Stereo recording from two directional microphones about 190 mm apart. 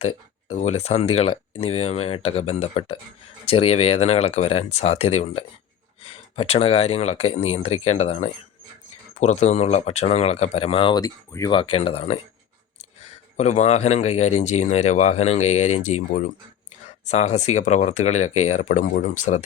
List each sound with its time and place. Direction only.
0.0 s speech: 35° left (ahead or behind)
13.3 s speech: 35° left (ahead or behind)